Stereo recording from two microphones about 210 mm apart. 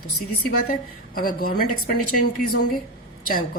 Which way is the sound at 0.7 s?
45° left (ahead or behind).